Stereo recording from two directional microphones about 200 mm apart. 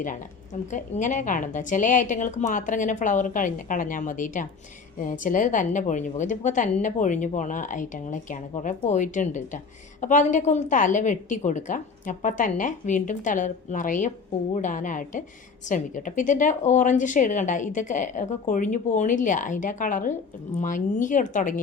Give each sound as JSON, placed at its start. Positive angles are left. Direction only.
{"t": 0.7, "sound": "speech", "side_deg": 40}